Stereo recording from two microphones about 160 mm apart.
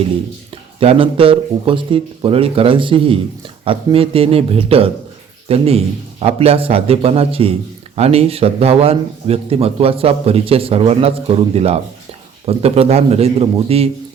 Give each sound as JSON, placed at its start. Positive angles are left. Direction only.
{"t": 0.5, "sound": "a man's voice", "side_deg": -35}